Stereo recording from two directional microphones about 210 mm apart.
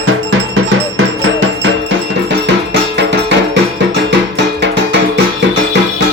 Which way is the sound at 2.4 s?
55° right (ahead or behind).